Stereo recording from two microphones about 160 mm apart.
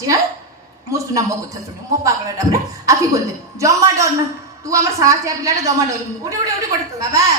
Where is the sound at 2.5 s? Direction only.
20° right (ahead or behind).